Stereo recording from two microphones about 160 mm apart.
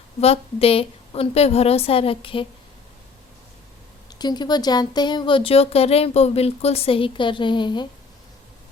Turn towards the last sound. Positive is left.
turn(degrees=30)  # may be behind; listen again after turning